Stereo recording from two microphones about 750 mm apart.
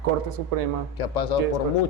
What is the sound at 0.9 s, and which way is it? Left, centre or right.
Speech, left.